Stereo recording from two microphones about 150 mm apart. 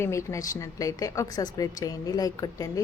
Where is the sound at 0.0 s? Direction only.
20° left (ahead or behind).